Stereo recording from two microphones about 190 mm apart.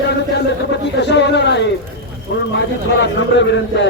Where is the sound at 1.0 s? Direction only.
65° left (ahead or behind).